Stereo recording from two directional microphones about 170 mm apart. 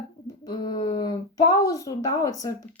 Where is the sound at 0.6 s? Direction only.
30° left (ahead or behind).